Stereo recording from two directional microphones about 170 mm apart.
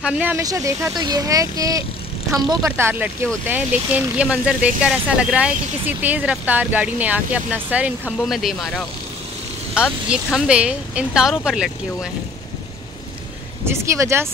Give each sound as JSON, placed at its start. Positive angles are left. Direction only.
{"t": 0.0, "sound": "speech", "side_deg": -10}
{"t": 0.4, "sound": "speech", "side_deg": -20}
{"t": 9.8, "sound": "speech", "side_deg": -5}
{"t": 13.7, "sound": "speech", "side_deg": -15}